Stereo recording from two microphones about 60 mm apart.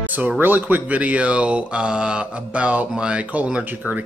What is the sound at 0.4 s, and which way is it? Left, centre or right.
Speech, right.